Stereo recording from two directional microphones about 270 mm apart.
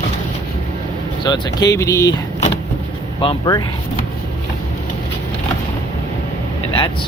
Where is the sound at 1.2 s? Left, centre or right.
Centre.